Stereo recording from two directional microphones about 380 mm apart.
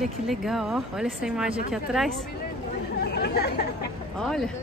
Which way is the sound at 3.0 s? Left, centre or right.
Left.